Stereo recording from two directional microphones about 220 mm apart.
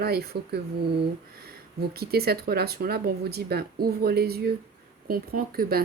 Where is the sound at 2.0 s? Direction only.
45° right (ahead or behind).